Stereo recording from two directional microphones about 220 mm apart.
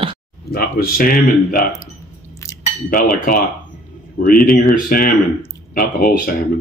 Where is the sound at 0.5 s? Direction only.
40° left (ahead or behind).